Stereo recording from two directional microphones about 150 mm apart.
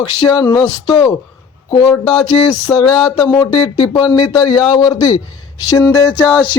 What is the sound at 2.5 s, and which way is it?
A man's voice, 25° left (ahead or behind).